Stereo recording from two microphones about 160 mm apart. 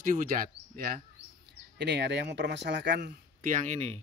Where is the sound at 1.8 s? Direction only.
90° right.